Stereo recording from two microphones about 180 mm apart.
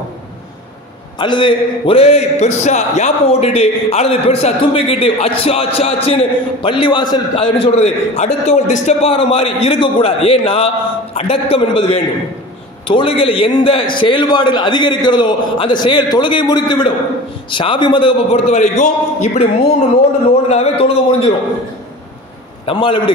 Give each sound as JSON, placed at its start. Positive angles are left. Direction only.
{"t": 1.1, "sound": "a man's voice", "side_deg": 25}
{"t": 20.4, "sound": "a man's voice", "side_deg": 35}
{"t": 22.7, "sound": "a man's voice", "side_deg": 30}